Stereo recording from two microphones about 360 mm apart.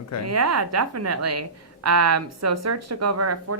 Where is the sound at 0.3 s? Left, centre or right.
Right.